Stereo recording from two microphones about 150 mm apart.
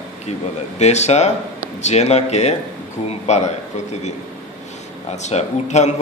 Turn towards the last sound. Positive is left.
turn(degrees=50)  # may be behind; listen again after turning